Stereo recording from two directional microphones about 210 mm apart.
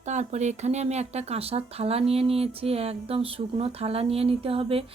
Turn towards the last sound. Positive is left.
turn(degrees=-25)  # may be behind; listen again after turning